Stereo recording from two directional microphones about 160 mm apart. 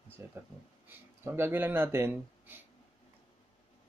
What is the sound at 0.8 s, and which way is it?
Speech, 15° right (ahead or behind).